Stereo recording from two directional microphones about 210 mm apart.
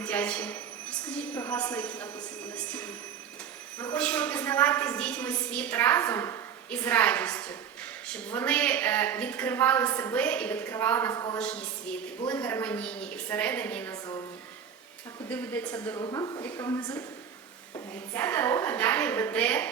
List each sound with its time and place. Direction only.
0.0 s a woman's voice: 5° left (ahead or behind)
3.9 s a woman's voice: 5° left (ahead or behind)
11.3 s a woman's voice: 5° left (ahead or behind)
15.3 s a woman's voice: 10° left (ahead or behind)